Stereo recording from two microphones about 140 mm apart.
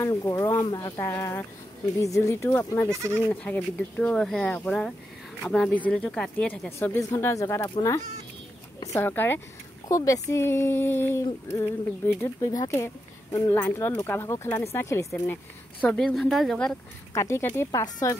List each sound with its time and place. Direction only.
0.0 s speech: 20° left (ahead or behind)
2.9 s speech: 20° right (ahead or behind)
3.3 s a woman's voice: 10° left (ahead or behind)
15.8 s a woman's voice: 10° left (ahead or behind)
17.1 s speech: 20° left (ahead or behind)
17.6 s speech: 25° left (ahead or behind)